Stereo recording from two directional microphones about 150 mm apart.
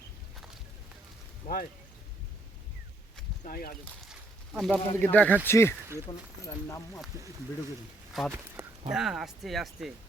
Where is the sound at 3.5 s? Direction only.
70° left (ahead or behind).